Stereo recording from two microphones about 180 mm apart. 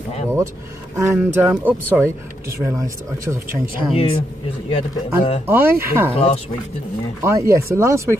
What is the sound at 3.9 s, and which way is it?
Speech, 30° left (ahead or behind).